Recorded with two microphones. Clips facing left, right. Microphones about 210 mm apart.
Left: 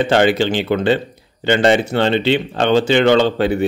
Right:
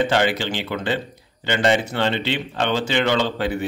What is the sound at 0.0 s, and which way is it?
Speech, 30° left (ahead or behind).